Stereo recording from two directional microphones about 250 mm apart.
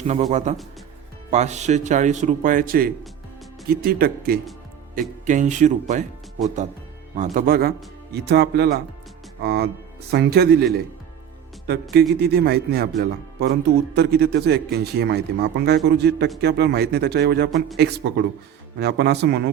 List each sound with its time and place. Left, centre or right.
0.1 s speech: right
7.3 s speech: right
12.2 s speech: right